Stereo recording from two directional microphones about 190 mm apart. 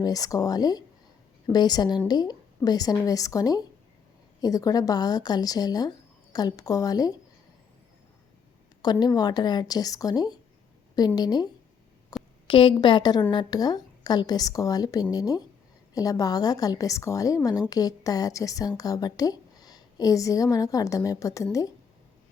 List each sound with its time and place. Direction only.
0.0 s a woman's voice: 20° left (ahead or behind)
8.8 s a woman's voice: 20° left (ahead or behind)
12.1 s a sound: 20° left (ahead or behind)
12.5 s a woman's voice: 25° left (ahead or behind)